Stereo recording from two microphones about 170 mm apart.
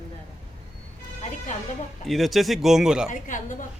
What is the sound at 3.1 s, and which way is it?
Speech, 50° left (ahead or behind).